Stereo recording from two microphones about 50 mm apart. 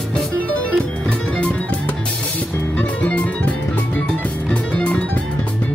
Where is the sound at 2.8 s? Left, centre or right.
Left.